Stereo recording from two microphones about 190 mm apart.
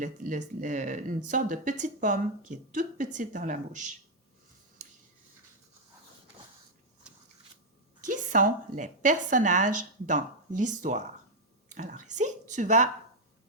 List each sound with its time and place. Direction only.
0.0 s speech: 40° right (ahead or behind)
8.0 s speech: 40° right (ahead or behind)